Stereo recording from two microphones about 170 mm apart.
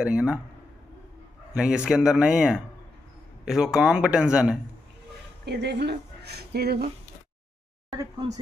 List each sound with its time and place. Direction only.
0.0 s a man's voice: 5° right (ahead or behind)
1.5 s a man's voice: 5° right (ahead or behind)
5.4 s speech: 80° right